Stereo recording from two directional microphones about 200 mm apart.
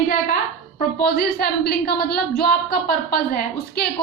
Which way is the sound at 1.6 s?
50° left (ahead or behind).